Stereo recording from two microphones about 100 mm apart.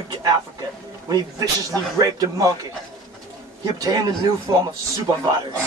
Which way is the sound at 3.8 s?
40° right (ahead or behind).